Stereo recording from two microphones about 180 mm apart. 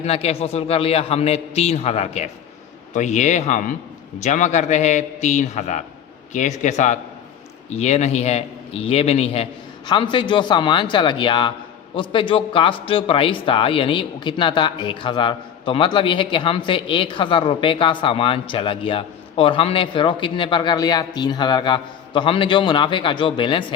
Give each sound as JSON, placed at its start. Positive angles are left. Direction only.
{"t": 0.0, "sound": "a man's voice", "side_deg": 35}